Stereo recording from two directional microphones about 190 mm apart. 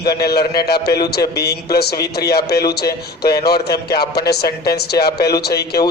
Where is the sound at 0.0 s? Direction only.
55° left (ahead or behind).